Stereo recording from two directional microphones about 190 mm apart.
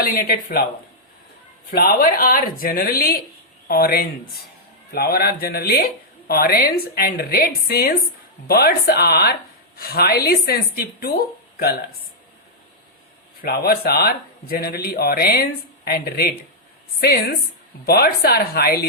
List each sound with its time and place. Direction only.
0.0 s speech: 50° left (ahead or behind)
1.7 s speech: 55° left (ahead or behind)
13.4 s speech: 55° left (ahead or behind)
17.8 s speech: 55° left (ahead or behind)